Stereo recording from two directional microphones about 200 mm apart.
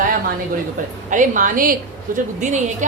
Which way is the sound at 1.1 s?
40° right (ahead or behind).